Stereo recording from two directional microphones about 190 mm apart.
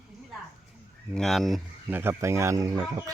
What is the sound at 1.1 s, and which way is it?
Speech, centre (ahead or behind).